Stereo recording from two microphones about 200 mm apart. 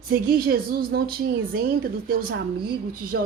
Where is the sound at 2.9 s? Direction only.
45° right (ahead or behind).